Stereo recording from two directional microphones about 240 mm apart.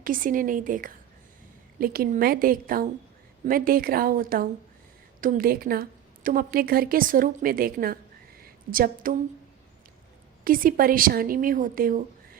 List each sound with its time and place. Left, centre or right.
0.0 s a woman's voice: right
10.4 s a woman's voice: right